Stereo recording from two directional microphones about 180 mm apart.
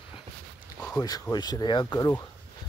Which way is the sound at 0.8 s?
20° left (ahead or behind).